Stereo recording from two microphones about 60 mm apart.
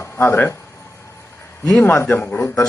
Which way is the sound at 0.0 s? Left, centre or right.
Left.